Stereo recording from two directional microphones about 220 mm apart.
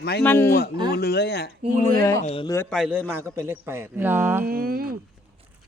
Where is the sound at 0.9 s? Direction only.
45° left (ahead or behind).